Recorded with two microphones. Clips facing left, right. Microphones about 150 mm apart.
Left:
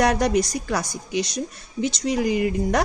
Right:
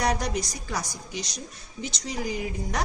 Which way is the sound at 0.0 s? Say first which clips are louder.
Left 8 dB; 60° left (ahead or behind).